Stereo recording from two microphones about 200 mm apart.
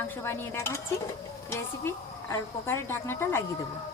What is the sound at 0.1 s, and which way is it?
Speech, 10° left (ahead or behind).